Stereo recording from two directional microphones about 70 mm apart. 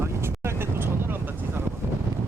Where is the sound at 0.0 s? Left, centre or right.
Right.